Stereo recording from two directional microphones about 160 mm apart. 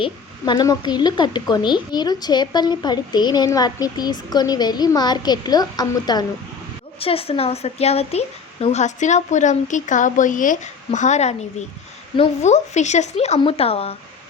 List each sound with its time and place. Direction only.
0.0 s speech: 25° left (ahead or behind)
7.0 s a woman's voice: 35° left (ahead or behind)